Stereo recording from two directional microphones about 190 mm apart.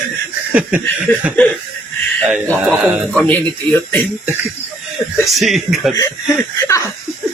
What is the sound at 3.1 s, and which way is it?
Speech, 5° left (ahead or behind).